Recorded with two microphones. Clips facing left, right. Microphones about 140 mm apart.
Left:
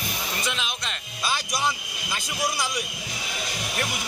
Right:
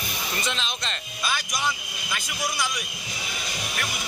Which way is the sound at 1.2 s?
30° left (ahead or behind).